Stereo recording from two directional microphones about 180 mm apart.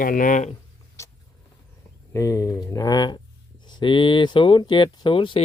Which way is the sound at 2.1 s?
20° left (ahead or behind).